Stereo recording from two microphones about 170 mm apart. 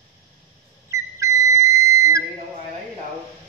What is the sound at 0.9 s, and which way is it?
Whistle, 20° right (ahead or behind).